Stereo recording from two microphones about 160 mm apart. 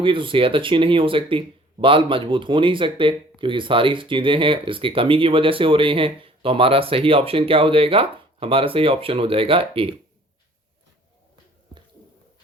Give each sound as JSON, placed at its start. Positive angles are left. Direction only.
{"t": 0.0, "sound": "speech", "side_deg": -30}